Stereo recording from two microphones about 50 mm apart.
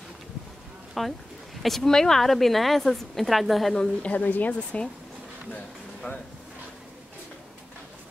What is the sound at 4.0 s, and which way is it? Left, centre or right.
Speech, left.